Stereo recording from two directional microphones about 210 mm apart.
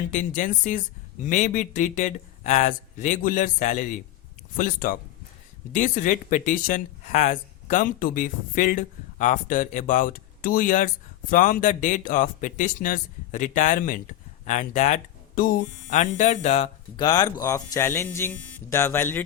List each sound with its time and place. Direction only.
0.1 s speech: 35° left (ahead or behind)
17.0 s speech: 20° left (ahead or behind)